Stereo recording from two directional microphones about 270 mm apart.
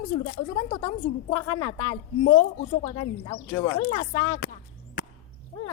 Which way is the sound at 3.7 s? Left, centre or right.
Left.